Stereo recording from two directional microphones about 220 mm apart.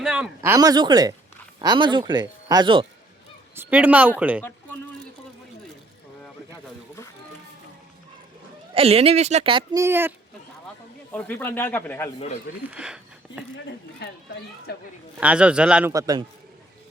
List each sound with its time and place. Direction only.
0.0 s speech: 5° right (ahead or behind)
3.5 s speech: 10° right (ahead or behind)
8.7 s speech: 25° right (ahead or behind); by 10.1 s 10° right (ahead or behind)
11.1 s speech: 10° left (ahead or behind)
12.7 s a sound: 5° right (ahead or behind)
14.0 s speech: 50° left (ahead or behind)
15.2 s speech: 5° right (ahead or behind)
15.9 s speech: 15° right (ahead or behind)